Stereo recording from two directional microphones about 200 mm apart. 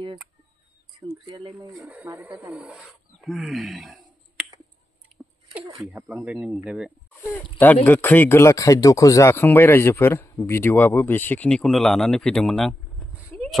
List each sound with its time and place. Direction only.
1.2 s speech: 25° right (ahead or behind)
1.7 s speech: 5° right (ahead or behind)
5.9 s speech: 10° right (ahead or behind)
7.5 s speech: 10° left (ahead or behind)
13.3 s a sound: 5° left (ahead or behind)